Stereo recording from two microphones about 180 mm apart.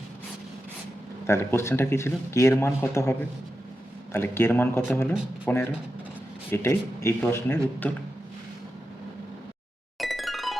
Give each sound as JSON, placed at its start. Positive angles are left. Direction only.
{"t": 1.3, "sound": "speech", "side_deg": 15}
{"t": 10.0, "sound": "music", "side_deg": 0}